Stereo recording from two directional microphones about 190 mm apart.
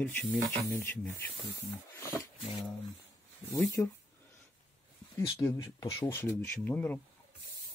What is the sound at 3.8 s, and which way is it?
Speech, 5° left (ahead or behind).